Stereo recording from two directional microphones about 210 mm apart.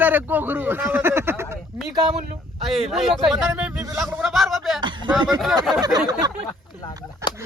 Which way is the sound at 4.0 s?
Centre (ahead or behind).